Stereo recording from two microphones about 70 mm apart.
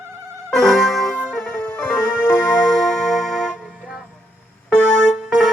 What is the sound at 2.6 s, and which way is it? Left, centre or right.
Music, centre.